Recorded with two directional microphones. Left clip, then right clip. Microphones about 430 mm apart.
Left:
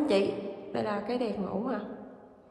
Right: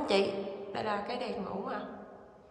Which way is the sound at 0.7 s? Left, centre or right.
Centre.